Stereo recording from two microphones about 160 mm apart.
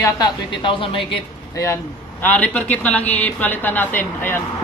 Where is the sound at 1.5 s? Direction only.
20° left (ahead or behind).